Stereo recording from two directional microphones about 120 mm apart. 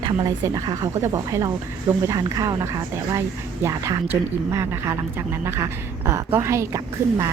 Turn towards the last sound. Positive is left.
turn(degrees=-25)  # may be behind; listen again after turning